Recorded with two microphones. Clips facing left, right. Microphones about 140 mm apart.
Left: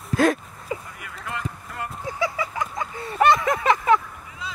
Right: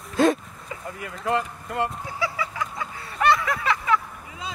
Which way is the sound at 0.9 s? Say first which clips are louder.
Right 8 dB; 30° right (ahead or behind).